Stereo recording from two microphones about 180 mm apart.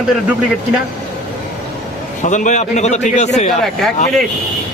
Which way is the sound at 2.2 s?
45° left (ahead or behind).